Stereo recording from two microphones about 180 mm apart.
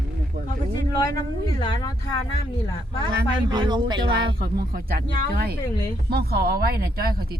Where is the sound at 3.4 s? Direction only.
25° right (ahead or behind).